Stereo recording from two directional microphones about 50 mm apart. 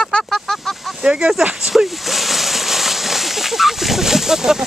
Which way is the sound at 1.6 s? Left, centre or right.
Centre.